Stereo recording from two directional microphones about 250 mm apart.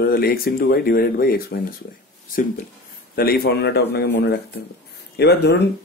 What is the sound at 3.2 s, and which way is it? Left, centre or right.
Speech, left.